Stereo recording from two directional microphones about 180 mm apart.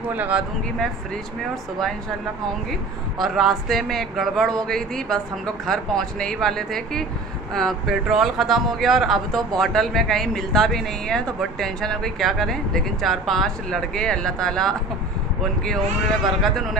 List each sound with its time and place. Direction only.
0.1 s speech: 10° right (ahead or behind)
3.2 s speech: centre (ahead or behind)